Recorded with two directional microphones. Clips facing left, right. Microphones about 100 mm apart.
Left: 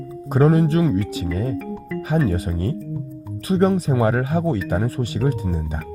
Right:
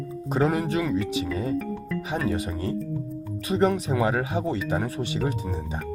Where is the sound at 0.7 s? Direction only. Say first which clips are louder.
Left 5 dB; 35° left (ahead or behind).